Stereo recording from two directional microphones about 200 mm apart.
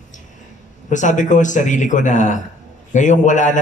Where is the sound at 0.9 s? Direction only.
40° left (ahead or behind).